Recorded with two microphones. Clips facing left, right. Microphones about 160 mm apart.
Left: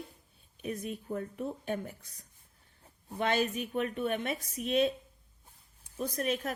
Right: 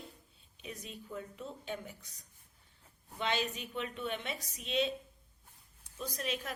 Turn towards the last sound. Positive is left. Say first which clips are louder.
# left 6 dB
turn(degrees=50)  # may be behind; listen again after turning